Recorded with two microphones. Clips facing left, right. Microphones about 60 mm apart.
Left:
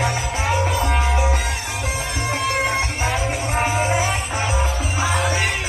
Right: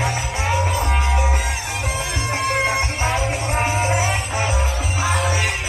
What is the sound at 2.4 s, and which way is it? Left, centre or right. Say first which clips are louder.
Music: right 2 dB; centre.